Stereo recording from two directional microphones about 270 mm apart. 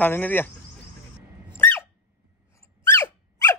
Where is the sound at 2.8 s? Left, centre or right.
Centre.